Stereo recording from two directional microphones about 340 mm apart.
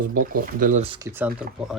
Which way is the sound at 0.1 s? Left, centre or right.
Right.